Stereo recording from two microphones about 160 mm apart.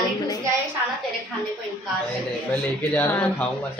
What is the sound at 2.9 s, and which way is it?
Speech, 10° left (ahead or behind).